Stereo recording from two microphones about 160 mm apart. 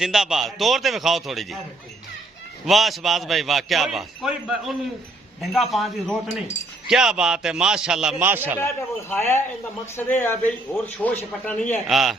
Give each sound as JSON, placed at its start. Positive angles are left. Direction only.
{"t": 0.0, "sound": "a man's voice", "side_deg": -5}
{"t": 2.6, "sound": "a man's voice", "side_deg": 0}
{"t": 8.5, "sound": "speech", "side_deg": 15}
{"t": 11.9, "sound": "a man's voice", "side_deg": 0}